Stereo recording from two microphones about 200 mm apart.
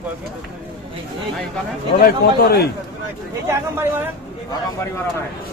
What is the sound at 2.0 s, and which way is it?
Speech, 50° left (ahead or behind).